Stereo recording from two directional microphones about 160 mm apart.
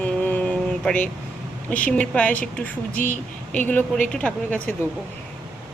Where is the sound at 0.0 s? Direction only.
10° left (ahead or behind).